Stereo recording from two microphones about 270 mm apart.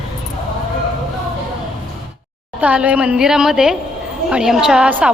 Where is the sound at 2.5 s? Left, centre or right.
Centre.